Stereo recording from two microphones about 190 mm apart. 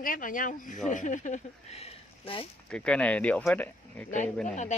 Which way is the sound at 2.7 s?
5° left (ahead or behind).